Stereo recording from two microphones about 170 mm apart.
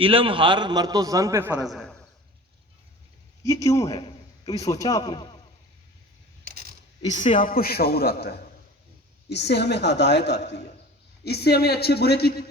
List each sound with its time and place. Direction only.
0.0 s a man's voice: 30° right (ahead or behind); by 2.0 s centre (ahead or behind)
3.4 s a man's voice: 20° left (ahead or behind)
7.0 s a man's voice: 45° left (ahead or behind); by 8.4 s 70° left (ahead or behind)
9.3 s a woman's voice: 80° left
11.2 s a man's voice: 70° left (ahead or behind)